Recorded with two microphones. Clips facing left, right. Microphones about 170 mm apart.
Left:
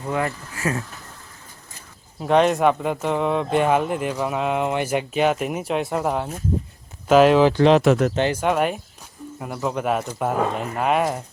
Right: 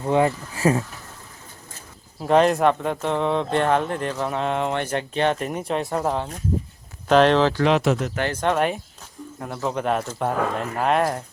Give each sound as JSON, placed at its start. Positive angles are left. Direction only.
{"t": 0.0, "sound": "speech", "side_deg": -25}
{"t": 2.1, "sound": "speech", "side_deg": 0}
{"t": 7.5, "sound": "speech", "side_deg": 30}
{"t": 7.8, "sound": "speech", "side_deg": 60}
{"t": 8.3, "sound": "speech", "side_deg": 5}